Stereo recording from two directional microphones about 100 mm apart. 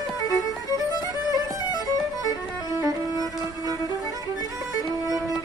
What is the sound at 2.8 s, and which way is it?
Music, 40° right (ahead or behind).